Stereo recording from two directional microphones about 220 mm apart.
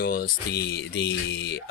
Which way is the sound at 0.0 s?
45° left (ahead or behind).